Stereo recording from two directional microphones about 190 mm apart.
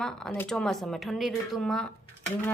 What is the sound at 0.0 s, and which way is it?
Speech, 5° left (ahead or behind).